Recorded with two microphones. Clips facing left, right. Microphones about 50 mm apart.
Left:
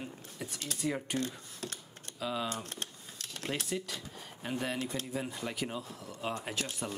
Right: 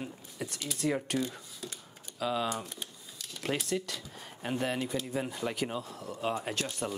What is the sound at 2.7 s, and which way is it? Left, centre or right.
Typewriter, left.